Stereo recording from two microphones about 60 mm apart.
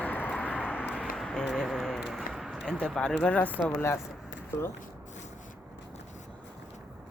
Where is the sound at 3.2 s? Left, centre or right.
Left.